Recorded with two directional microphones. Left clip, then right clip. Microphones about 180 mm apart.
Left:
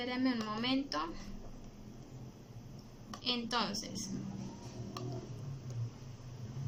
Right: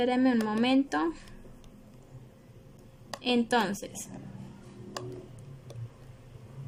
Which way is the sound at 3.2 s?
45° right (ahead or behind).